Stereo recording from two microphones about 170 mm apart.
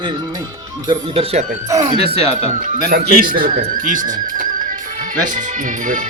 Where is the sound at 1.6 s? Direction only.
20° right (ahead or behind).